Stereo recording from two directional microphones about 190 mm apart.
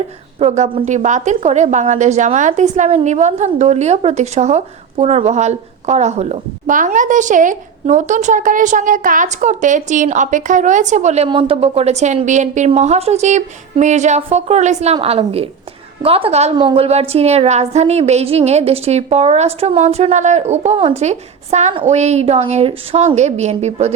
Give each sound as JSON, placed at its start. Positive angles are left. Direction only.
{"t": 0.3, "sound": "a woman's voice", "side_deg": -35}